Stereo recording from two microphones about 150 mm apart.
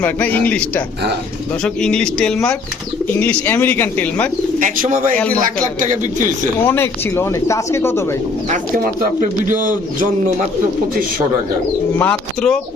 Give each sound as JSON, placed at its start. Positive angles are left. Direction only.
{"t": 0.0, "sound": "speech", "side_deg": 10}
{"t": 1.6, "sound": "speech", "side_deg": 5}
{"t": 4.6, "sound": "speech", "side_deg": -60}
{"t": 6.7, "sound": "speech", "side_deg": 15}
{"t": 8.4, "sound": "speech", "side_deg": -60}
{"t": 11.9, "sound": "speech", "side_deg": 10}